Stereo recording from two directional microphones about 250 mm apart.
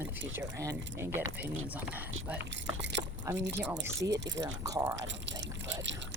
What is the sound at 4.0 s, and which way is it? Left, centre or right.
Speech, right.